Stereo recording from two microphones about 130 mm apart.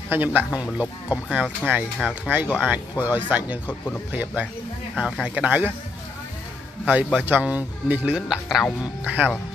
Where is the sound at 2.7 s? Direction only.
15° right (ahead or behind).